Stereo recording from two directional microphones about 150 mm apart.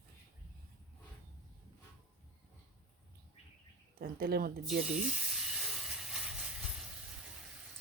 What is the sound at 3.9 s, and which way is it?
Speech, 85° right.